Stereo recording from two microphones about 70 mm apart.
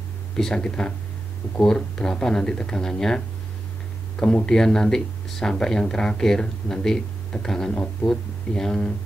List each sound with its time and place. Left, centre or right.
0.4 s speech: centre
4.2 s speech: centre
7.7 s speech: centre
8.1 s speech: centre